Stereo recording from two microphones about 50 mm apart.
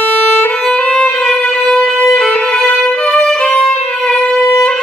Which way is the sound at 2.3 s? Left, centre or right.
Centre.